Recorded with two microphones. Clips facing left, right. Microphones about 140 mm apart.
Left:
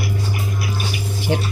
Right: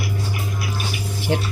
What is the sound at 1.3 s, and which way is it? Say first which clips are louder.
Speech: left 1 dB; centre (ahead or behind).